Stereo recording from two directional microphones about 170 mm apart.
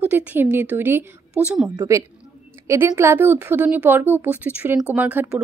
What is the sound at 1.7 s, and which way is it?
A woman's voice, 20° right (ahead or behind).